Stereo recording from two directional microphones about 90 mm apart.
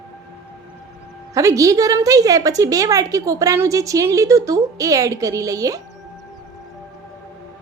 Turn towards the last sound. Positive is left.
turn(degrees=-40)  # may be behind; listen again after turning